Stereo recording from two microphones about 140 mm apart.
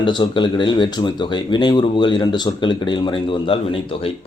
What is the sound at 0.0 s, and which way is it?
Speech, 35° left (ahead or behind).